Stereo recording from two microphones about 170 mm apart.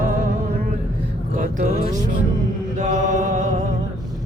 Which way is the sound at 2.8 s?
50° right (ahead or behind).